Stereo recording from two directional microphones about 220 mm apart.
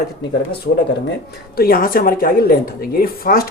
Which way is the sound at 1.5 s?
40° left (ahead or behind).